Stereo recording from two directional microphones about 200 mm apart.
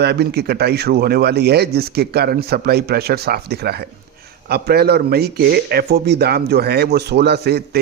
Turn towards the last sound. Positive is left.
turn(degrees=-55)  # may be behind; listen again after turning